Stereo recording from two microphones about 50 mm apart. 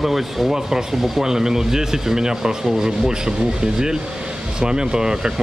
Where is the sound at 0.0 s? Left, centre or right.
Centre.